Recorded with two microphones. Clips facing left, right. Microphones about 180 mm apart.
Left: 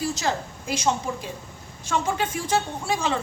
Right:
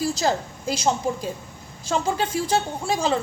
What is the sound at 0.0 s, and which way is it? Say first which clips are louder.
A woman's voice: right 3 dB; 35° right (ahead or behind).